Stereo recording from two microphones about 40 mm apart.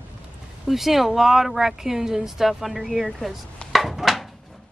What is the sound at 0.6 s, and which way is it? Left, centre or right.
Speech, centre.